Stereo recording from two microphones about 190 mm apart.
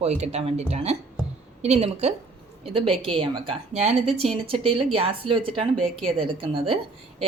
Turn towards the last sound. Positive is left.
turn(degrees=-30)  # may be behind; listen again after turning